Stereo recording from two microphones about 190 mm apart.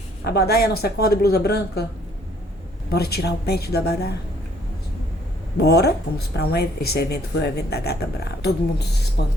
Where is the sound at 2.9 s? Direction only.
55° left (ahead or behind).